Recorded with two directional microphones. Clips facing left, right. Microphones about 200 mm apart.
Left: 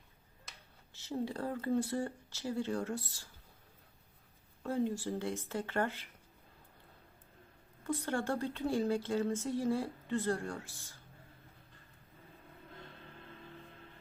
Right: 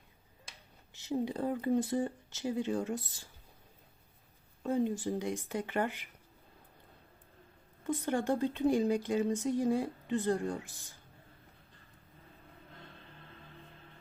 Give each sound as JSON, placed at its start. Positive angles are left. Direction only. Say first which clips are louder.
{"t": 0.9, "sound": "speech", "louder": "right 4 dB", "side_deg": -15}
{"t": 4.6, "sound": "speech", "louder": "right 3 dB", "side_deg": -20}
{"t": 7.9, "sound": "speech", "louder": "right 3 dB", "side_deg": -20}